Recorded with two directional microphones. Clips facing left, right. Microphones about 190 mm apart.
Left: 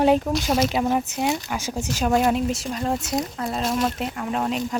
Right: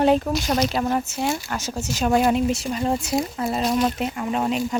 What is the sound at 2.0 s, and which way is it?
Speech, centre (ahead or behind).